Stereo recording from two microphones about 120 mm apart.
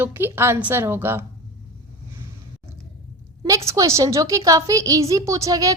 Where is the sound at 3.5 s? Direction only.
25° right (ahead or behind).